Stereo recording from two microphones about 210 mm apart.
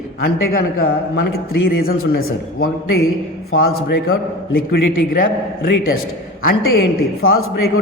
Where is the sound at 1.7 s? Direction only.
45° left (ahead or behind).